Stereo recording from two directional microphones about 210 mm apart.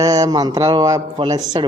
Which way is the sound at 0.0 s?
15° right (ahead or behind).